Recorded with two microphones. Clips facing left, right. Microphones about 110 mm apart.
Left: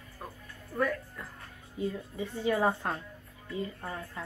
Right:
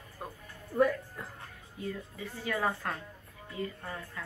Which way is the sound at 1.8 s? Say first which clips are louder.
Left 5 dB; 25° left (ahead or behind).